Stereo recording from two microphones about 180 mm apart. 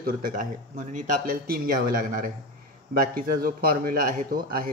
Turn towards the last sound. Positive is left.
turn(degrees=-50)  # may be behind; listen again after turning